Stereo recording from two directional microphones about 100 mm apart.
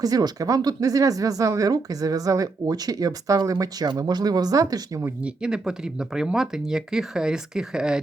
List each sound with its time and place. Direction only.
0.0 s speech: 40° right (ahead or behind)
5.2 s speech: 5° right (ahead or behind)